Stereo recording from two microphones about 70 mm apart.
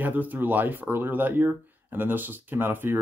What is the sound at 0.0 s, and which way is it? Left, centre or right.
Speech, right.